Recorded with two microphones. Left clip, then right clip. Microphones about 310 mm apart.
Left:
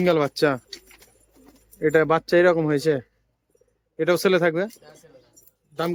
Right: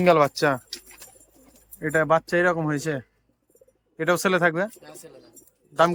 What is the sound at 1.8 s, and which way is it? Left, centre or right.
Speech, centre.